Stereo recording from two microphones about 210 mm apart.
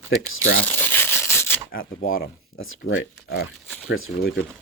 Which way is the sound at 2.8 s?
50° left (ahead or behind).